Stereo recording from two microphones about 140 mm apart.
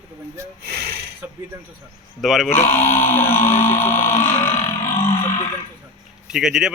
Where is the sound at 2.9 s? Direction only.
15° left (ahead or behind).